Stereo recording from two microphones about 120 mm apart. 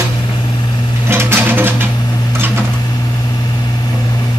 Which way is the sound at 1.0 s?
20° right (ahead or behind).